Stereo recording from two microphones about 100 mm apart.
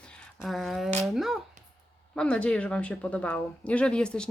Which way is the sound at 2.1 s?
10° left (ahead or behind).